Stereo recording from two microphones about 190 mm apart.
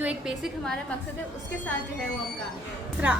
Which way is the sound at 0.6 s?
5° left (ahead or behind).